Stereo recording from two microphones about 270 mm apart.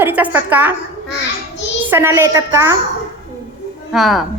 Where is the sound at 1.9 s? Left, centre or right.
Centre.